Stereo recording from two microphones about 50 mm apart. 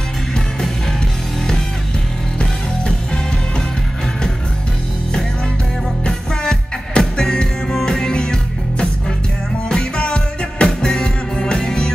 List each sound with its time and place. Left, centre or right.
6.0 s music: centre